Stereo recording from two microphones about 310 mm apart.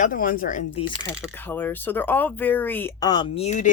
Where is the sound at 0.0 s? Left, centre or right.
Left.